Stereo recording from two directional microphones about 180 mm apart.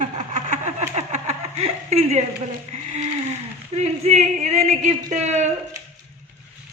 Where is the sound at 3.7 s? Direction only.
40° right (ahead or behind).